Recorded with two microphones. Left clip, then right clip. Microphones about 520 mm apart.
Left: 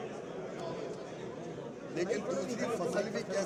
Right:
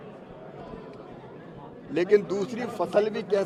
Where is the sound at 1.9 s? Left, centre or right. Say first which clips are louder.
Right 12 dB; right.